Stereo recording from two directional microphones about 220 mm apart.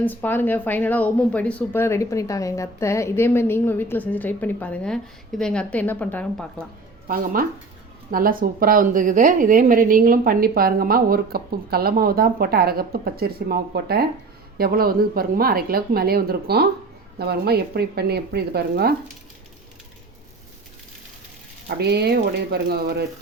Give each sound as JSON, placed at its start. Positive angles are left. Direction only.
{"t": 0.0, "sound": "speech", "side_deg": 10}
{"t": 7.1, "sound": "speech", "side_deg": -40}
{"t": 21.7, "sound": "speech", "side_deg": -50}